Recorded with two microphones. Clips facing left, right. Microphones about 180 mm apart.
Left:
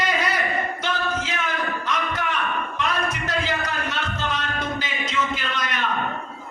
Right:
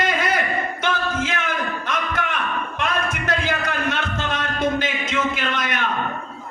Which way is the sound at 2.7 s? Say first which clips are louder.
Right 2 dB; 50° right (ahead or behind).